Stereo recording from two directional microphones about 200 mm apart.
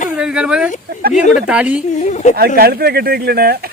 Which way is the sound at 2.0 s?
35° left (ahead or behind).